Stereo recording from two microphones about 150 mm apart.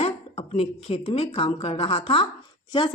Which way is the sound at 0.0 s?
40° left (ahead or behind).